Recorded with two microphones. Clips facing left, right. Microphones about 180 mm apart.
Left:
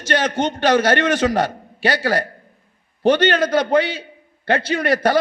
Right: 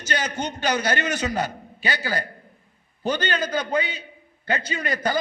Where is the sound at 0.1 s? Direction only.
75° left (ahead or behind).